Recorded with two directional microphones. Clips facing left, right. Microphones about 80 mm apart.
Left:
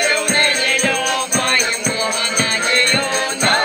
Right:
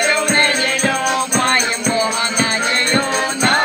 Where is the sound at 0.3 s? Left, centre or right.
Right.